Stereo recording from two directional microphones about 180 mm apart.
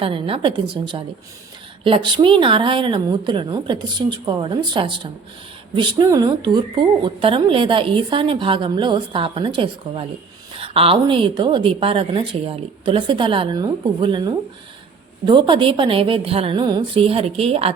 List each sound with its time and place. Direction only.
0.0 s a woman's voice: 30° right (ahead or behind)